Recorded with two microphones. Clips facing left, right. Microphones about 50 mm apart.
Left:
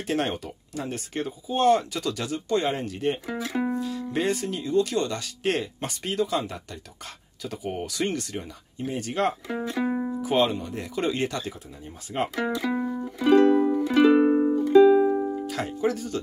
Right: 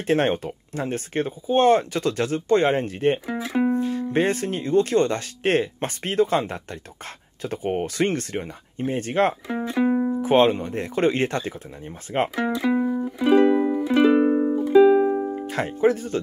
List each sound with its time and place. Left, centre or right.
0.0 s speech: right
3.3 s speech: centre
3.7 s music: right
4.1 s speech: right
9.3 s speech: centre
10.1 s speech: right
12.4 s music: centre
15.3 s speech: right